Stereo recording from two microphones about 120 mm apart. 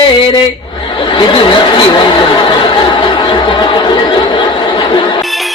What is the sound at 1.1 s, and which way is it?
Speech, 45° left (ahead or behind).